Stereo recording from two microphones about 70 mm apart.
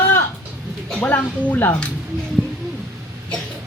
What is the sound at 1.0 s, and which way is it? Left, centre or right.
Speech, left.